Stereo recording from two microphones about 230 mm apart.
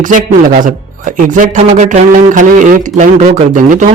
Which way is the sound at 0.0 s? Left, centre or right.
Right.